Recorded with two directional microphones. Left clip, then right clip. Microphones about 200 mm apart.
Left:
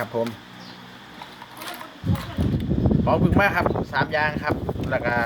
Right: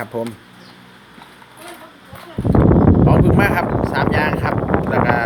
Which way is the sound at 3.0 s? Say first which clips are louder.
Right 4 dB; 35° right (ahead or behind).